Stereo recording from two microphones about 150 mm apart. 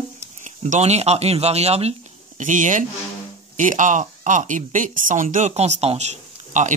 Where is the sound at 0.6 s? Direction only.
45° right (ahead or behind).